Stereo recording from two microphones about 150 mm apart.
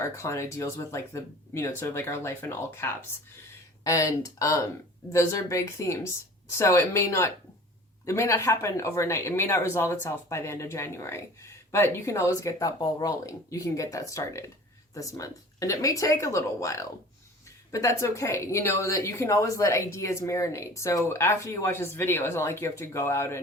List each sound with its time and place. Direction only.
0.0 s speech: 20° left (ahead or behind)